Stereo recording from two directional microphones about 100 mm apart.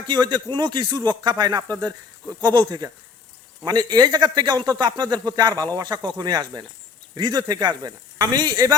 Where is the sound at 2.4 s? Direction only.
45° right (ahead or behind).